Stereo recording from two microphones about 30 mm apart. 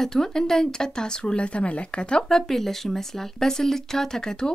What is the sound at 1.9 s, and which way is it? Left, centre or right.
Speech, left.